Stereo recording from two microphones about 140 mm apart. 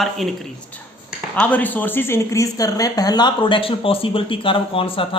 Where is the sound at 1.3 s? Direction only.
10° left (ahead or behind).